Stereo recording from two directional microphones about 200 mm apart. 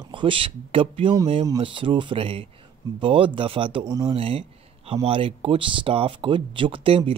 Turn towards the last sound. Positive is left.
turn(degrees=-25)  # may be behind; listen again after turning